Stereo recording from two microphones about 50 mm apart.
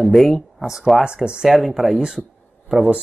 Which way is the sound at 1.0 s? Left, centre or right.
Centre.